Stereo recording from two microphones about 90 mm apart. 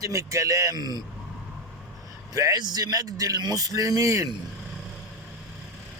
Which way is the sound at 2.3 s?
40° right (ahead or behind).